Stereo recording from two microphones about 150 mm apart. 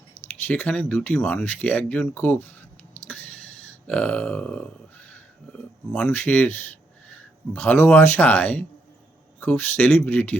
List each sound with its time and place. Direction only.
0.4 s speech: 10° left (ahead or behind)
3.1 s a sound: 10° left (ahead or behind)
3.8 s speech: 10° left (ahead or behind)